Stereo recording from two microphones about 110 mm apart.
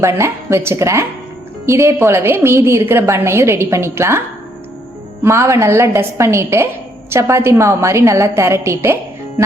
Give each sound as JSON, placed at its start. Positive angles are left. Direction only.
{"t": 0.0, "sound": "a woman's voice", "side_deg": -25}
{"t": 5.2, "sound": "a woman's voice", "side_deg": -25}